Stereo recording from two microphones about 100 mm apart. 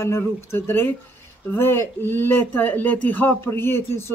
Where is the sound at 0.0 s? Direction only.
25° left (ahead or behind).